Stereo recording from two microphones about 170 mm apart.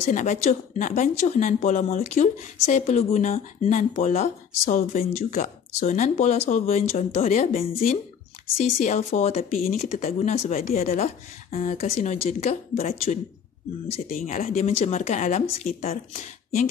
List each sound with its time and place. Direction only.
0.1 s speech: 45° left (ahead or behind)
9.6 s speech: 50° left (ahead or behind)